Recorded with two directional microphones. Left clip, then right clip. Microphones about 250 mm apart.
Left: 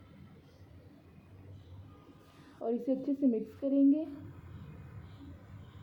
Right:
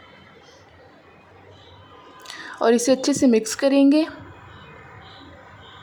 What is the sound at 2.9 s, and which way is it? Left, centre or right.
A woman's voice, centre.